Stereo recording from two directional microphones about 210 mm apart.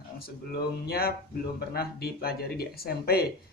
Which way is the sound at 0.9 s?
45° left (ahead or behind).